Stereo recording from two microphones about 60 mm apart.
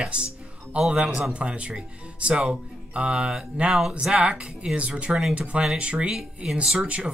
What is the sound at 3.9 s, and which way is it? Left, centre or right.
Speech, centre.